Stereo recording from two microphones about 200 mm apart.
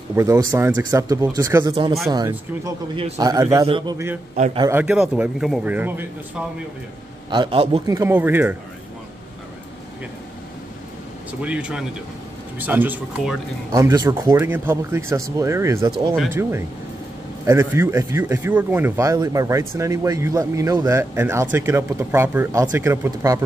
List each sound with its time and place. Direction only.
0.1 s a man's voice: 15° right (ahead or behind)
4.6 s speech: 10° right (ahead or behind)
7.2 s speech: 25° right (ahead or behind); by 8.5 s 10° right (ahead or behind)
11.4 s speech: 5° right (ahead or behind)
13.7 s speech: 15° right (ahead or behind)